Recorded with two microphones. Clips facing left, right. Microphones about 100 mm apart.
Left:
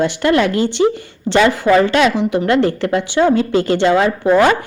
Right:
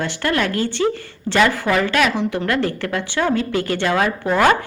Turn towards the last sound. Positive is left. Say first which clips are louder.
# left 4 dB
turn(degrees=20)  # may be behind; listen again after turning